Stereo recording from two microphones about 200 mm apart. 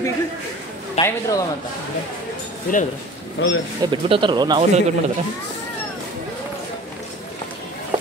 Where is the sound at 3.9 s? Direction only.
25° right (ahead or behind).